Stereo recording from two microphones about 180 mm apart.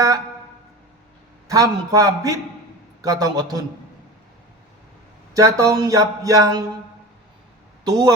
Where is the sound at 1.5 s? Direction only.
20° right (ahead or behind).